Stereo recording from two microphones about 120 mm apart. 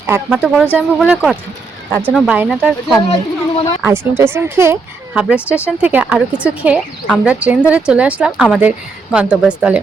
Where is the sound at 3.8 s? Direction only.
20° right (ahead or behind).